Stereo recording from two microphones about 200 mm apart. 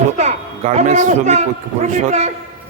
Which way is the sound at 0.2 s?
35° right (ahead or behind).